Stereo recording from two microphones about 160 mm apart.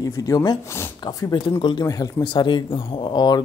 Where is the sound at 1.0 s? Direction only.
30° left (ahead or behind).